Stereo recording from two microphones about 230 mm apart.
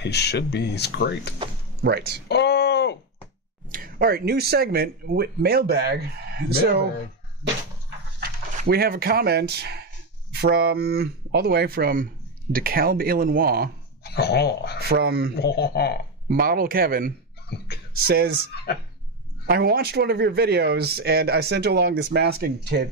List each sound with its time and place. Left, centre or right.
0.0 s speech: left
1.8 s speech: right
2.2 s a sound: left
3.6 s speech: right
8.2 s speech: right
14.0 s speech: left
14.8 s speech: right
15.3 s speech: left
16.3 s speech: right
19.4 s speech: right